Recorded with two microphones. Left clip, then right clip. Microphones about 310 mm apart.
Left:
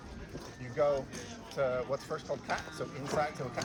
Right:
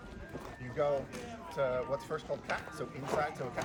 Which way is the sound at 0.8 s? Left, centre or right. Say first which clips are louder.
Left 2 dB; centre.